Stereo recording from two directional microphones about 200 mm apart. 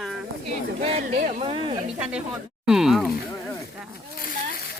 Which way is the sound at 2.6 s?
Centre (ahead or behind).